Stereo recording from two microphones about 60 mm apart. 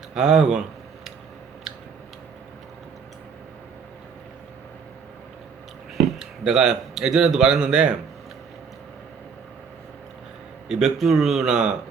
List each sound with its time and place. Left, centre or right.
0.1 s speech: centre
6.1 s speech: centre
10.7 s speech: centre